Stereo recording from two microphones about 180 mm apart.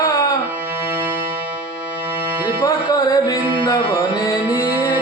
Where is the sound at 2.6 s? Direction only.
20° left (ahead or behind).